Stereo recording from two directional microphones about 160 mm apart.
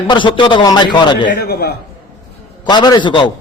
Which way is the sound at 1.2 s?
75° left (ahead or behind).